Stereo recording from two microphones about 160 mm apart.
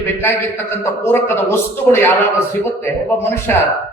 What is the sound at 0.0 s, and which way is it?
A man's voice, 15° left (ahead or behind).